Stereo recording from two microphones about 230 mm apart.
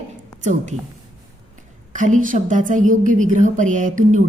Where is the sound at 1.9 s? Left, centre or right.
Right.